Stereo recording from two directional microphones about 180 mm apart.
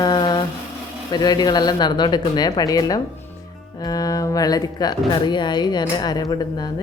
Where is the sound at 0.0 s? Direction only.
25° left (ahead or behind).